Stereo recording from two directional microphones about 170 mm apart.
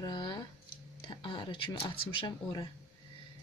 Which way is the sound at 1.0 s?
30° left (ahead or behind).